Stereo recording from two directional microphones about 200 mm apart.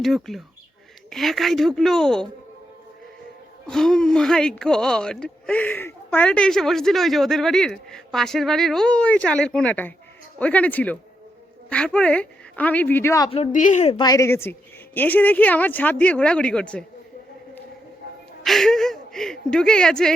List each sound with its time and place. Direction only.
0.0 s speech: centre (ahead or behind)
3.7 s a woman's voice: 5° left (ahead or behind)
13.3 s speech: 35° left (ahead or behind)
13.9 s a woman's voice: 20° left (ahead or behind)
18.4 s speech: centre (ahead or behind)